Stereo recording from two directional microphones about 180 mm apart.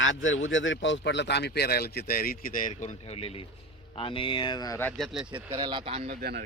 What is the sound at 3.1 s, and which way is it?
A man's voice, 30° left (ahead or behind).